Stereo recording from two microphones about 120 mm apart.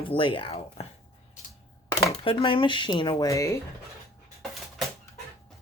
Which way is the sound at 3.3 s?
25° left (ahead or behind).